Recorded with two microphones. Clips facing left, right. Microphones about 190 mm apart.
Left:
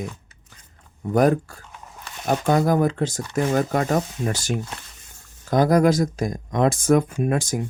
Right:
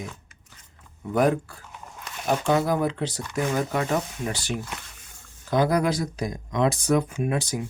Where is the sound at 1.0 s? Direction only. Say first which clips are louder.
Left 4 dB; 45° left (ahead or behind).